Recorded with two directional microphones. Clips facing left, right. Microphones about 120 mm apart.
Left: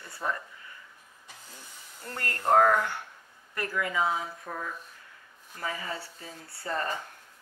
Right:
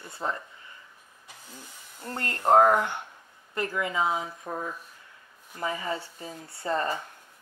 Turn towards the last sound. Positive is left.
turn(degrees=-20)  # may be behind; listen again after turning